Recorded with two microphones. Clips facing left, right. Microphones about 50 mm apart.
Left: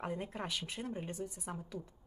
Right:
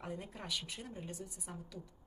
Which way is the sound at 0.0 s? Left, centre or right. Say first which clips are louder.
Left 5 dB; left.